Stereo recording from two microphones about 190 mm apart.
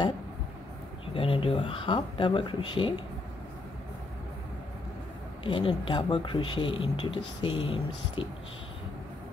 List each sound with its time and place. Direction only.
1.1 s speech: 30° left (ahead or behind)
5.4 s speech: 25° left (ahead or behind)